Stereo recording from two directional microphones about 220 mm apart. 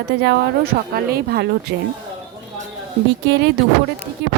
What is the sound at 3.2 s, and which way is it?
A woman's voice, 55° right (ahead or behind).